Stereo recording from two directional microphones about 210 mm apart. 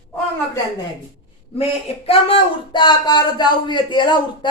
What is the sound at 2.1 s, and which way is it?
Speech, 25° left (ahead or behind).